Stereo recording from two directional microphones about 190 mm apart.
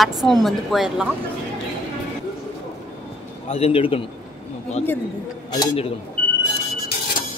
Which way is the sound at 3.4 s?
35° left (ahead or behind).